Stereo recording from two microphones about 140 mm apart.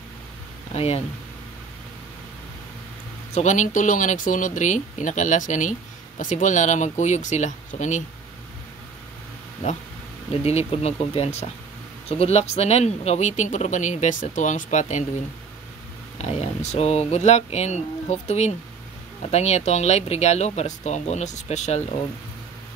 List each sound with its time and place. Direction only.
0.7 s speech: 45° left (ahead or behind)
3.3 s speech: 60° left (ahead or behind)
10.3 s speech: 45° left (ahead or behind)
16.2 s speech: 50° left (ahead or behind)